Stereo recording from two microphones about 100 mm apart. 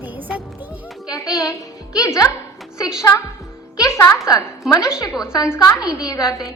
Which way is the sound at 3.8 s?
30° left (ahead or behind).